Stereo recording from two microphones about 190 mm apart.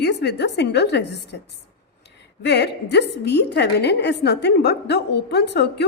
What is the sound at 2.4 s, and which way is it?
A woman's voice, 60° left (ahead or behind).